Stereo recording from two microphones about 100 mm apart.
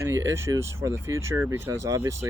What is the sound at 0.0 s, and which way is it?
Speech, 30° right (ahead or behind).